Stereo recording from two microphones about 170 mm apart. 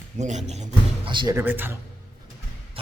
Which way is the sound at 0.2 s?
45° right (ahead or behind).